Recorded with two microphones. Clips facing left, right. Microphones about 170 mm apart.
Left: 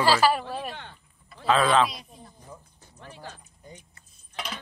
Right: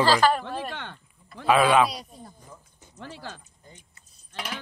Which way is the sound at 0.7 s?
90° right.